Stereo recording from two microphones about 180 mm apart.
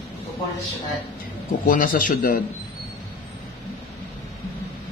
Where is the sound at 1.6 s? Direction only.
50° left (ahead or behind).